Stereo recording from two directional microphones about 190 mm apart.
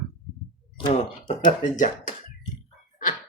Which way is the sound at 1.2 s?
40° left (ahead or behind).